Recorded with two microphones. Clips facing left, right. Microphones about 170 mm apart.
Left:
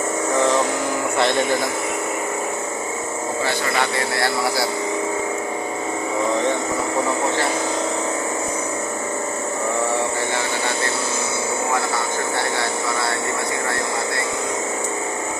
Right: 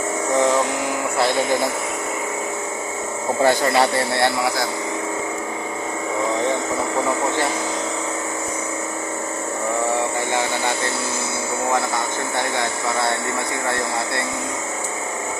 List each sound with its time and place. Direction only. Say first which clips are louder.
3.4 s speech: right 7 dB; 35° right (ahead or behind)